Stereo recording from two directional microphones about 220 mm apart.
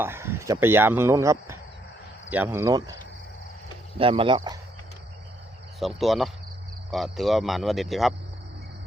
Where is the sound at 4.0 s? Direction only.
25° right (ahead or behind).